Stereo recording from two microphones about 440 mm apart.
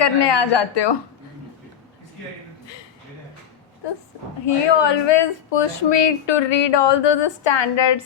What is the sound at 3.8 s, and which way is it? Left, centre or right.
A woman's voice, left.